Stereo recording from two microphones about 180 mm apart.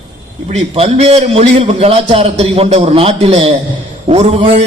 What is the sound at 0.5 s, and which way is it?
A man's voice, 35° right (ahead or behind).